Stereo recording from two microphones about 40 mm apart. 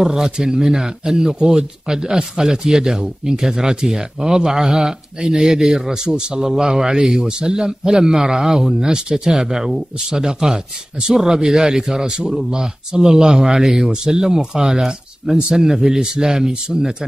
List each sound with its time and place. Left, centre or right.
0.0 s a man's voice: centre